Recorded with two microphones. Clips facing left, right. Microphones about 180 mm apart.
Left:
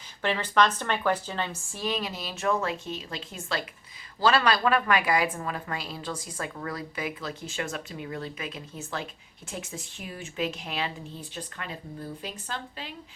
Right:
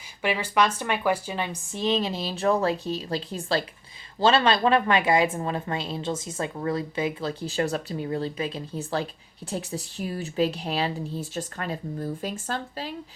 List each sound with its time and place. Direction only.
0.2 s speech: 10° right (ahead or behind); by 12.9 s 40° right (ahead or behind)